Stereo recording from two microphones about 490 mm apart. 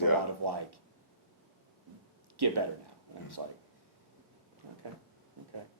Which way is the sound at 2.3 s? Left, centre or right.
Right.